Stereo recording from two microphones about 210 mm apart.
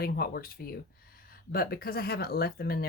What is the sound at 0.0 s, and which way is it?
Speech, 45° left (ahead or behind).